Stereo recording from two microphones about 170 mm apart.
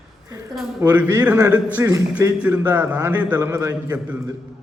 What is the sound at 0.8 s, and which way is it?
A man's voice, 15° right (ahead or behind).